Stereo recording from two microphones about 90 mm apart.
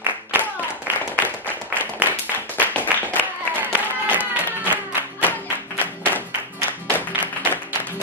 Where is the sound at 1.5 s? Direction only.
20° right (ahead or behind).